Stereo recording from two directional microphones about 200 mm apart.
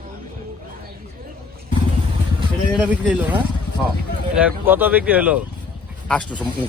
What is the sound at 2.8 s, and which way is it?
Speech, 5° right (ahead or behind).